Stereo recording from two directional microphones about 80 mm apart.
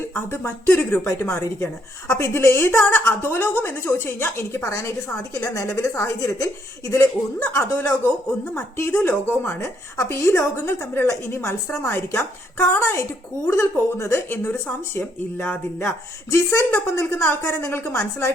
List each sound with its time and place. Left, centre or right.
0.1 s speech: left
7.0 s a woman's voice: left
9.6 s speech: left
15.8 s speech: left